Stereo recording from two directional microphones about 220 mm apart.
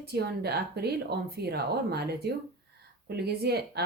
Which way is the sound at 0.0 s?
45° right (ahead or behind).